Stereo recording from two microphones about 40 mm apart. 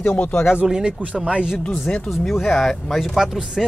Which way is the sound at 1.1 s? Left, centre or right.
Right.